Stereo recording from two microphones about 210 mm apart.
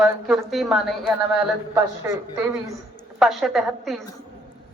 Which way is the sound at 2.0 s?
15° right (ahead or behind).